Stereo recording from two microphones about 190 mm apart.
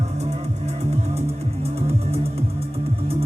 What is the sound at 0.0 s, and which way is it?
Music, 35° right (ahead or behind).